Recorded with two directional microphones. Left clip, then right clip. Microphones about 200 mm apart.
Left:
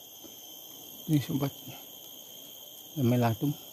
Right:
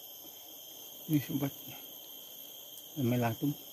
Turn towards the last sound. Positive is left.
turn(degrees=20)  # may be behind; listen again after turning